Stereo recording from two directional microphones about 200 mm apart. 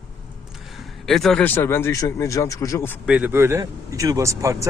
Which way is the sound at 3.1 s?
5° right (ahead or behind).